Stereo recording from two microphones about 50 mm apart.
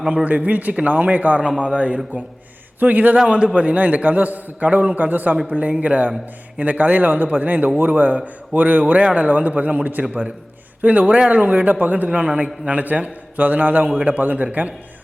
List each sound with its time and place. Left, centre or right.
0.3 s a man's voice: right
1.4 s a man's voice: centre
2.8 s a man's voice: right
3.2 s a man's voice: centre